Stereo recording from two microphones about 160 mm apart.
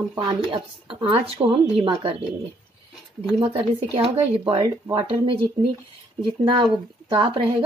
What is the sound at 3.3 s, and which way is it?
Speech, 35° right (ahead or behind).